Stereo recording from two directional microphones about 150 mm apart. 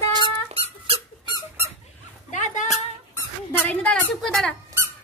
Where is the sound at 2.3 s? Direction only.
55° left (ahead or behind).